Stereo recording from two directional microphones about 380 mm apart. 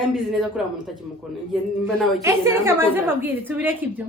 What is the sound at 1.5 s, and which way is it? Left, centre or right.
A woman's voice, centre.